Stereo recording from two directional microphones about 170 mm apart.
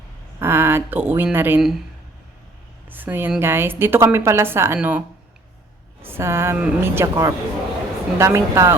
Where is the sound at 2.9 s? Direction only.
10° right (ahead or behind).